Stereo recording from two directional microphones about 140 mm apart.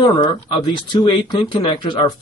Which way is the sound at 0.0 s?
35° left (ahead or behind).